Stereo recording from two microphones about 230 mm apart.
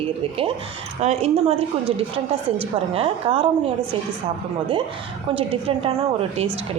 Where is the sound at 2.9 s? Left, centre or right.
Right.